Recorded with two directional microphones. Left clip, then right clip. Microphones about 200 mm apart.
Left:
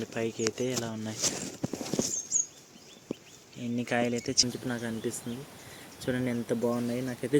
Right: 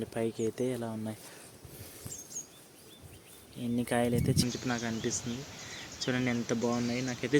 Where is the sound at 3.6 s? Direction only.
10° right (ahead or behind).